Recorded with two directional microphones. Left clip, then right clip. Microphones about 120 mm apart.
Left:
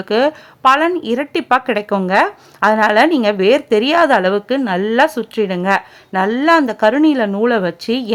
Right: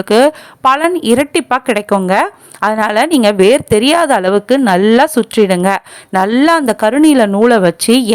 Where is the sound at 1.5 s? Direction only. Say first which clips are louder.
Right 2 dB; 35° right (ahead or behind).